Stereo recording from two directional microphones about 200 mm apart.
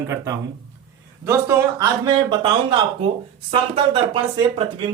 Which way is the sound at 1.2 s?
15° right (ahead or behind).